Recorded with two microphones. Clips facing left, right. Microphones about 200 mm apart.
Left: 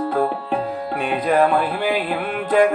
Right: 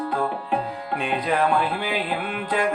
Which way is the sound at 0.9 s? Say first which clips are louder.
Left 5 dB; 50° left (ahead or behind).